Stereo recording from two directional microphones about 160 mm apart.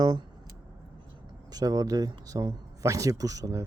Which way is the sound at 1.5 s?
25° right (ahead or behind).